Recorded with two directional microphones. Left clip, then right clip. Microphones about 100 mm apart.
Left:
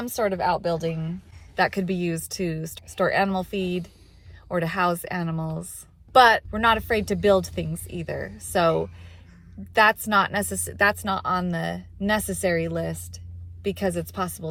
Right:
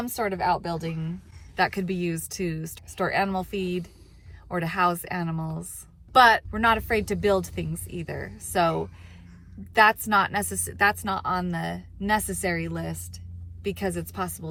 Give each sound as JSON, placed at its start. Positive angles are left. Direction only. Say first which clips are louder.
{"t": 0.0, "sound": "a woman's voice", "louder": "left 2 dB", "side_deg": 30}
{"t": 0.9, "sound": "speech", "louder": "left 5 dB", "side_deg": -15}
{"t": 1.5, "sound": "a woman's voice", "louder": "left 2 dB", "side_deg": 45}
{"t": 9.7, "sound": "a woman's voice", "louder": "left 1 dB", "side_deg": 45}